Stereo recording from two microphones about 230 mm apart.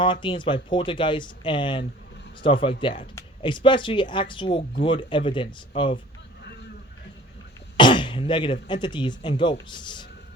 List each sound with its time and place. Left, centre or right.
0.0 s speech: left
7.8 s speech: left